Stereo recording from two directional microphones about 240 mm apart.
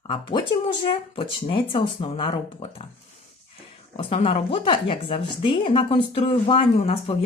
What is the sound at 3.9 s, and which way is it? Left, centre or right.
Speech, left.